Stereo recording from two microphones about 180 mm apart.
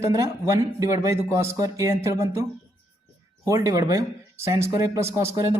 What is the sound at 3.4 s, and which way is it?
A man's voice, 15° right (ahead or behind).